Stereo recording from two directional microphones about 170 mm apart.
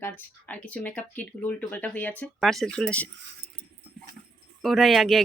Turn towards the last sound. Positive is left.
turn(degrees=0)  # may be behind; listen again after turning